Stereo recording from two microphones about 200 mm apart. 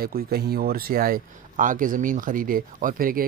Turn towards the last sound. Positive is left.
turn(degrees=-45)  # may be behind; listen again after turning